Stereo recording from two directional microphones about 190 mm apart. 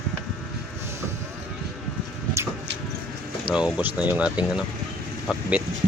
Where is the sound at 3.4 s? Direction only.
5° right (ahead or behind).